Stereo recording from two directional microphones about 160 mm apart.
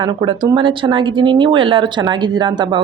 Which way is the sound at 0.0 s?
30° right (ahead or behind).